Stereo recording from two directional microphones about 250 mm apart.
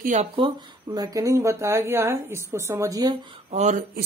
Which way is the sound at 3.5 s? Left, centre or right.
Right.